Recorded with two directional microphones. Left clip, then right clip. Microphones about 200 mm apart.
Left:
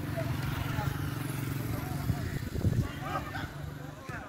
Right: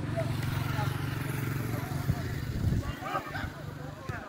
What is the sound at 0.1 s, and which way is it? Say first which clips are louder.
Vehicle: right 2 dB; 25° left (ahead or behind).